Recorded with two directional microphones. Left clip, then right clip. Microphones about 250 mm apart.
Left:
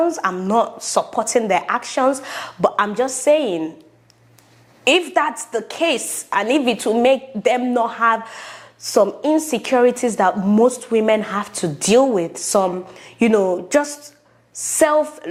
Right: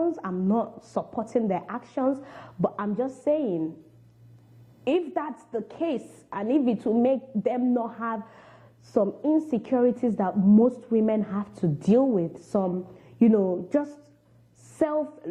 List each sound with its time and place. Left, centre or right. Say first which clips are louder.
0.0 s a woman's voice: left 9 dB; centre
4.8 s a woman's voice: left 11 dB; centre
5.5 s a woman's voice: left 9 dB; centre
10.7 s a woman's voice: left 9 dB; centre
15.2 s a woman's voice: left 7 dB; centre